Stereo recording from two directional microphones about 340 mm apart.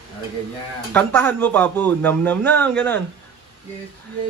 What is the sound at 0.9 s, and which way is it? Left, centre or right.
Speech, centre.